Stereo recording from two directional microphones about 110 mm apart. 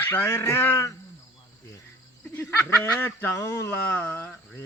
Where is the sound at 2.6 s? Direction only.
20° left (ahead or behind).